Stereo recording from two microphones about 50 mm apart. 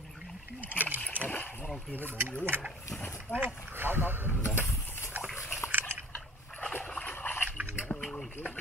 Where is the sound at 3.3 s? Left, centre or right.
Right.